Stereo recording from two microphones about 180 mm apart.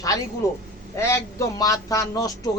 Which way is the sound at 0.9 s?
15° left (ahead or behind).